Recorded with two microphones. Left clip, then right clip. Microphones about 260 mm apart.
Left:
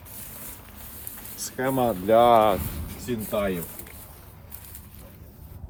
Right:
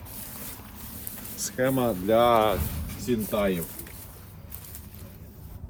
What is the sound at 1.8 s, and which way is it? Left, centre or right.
Speech, left.